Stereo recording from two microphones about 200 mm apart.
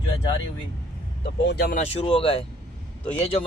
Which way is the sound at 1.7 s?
30° left (ahead or behind).